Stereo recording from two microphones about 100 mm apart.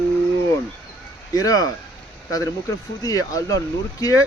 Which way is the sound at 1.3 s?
35° left (ahead or behind).